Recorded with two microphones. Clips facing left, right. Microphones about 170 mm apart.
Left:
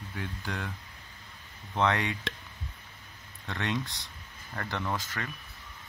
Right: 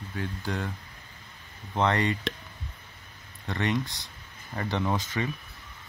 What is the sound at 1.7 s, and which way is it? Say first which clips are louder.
Speech: right 2 dB; 15° right (ahead or behind).